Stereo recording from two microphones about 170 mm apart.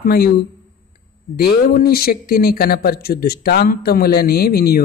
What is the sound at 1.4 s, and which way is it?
Speech, 65° left (ahead or behind).